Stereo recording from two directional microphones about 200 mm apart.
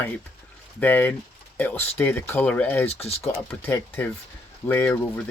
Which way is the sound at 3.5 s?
10° left (ahead or behind).